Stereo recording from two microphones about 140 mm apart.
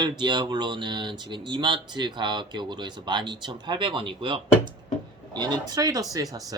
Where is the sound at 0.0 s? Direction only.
30° right (ahead or behind).